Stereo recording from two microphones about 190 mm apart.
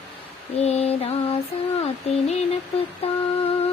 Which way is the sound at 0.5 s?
35° left (ahead or behind).